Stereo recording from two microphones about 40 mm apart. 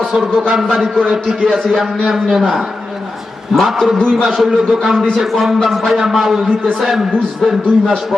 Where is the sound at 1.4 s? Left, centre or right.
Centre.